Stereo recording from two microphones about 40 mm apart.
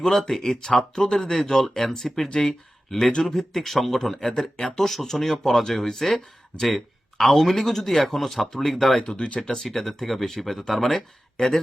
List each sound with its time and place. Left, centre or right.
0.0 s speech: centre
9.1 s speech: left
9.4 s speech: centre